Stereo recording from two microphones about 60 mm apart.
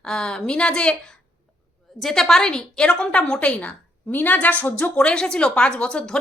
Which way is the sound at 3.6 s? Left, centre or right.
Left.